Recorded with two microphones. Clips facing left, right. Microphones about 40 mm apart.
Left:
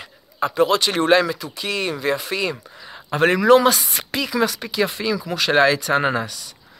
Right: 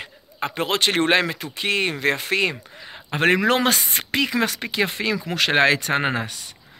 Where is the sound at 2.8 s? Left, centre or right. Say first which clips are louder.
Left 2 dB; right.